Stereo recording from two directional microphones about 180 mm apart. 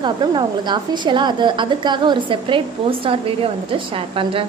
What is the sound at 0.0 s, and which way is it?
A woman's voice, 25° right (ahead or behind).